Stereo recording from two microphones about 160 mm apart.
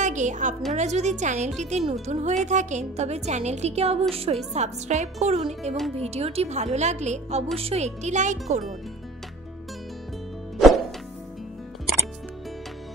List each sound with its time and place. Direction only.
0.0 s a woman's voice: 50° right (ahead or behind)